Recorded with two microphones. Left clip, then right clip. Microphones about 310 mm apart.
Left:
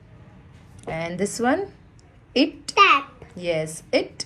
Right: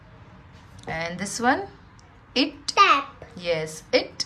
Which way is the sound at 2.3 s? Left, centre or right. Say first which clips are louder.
Left 3 dB; centre.